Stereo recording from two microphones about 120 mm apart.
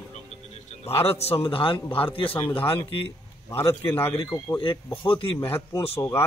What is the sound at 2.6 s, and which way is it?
Speech, 50° left (ahead or behind).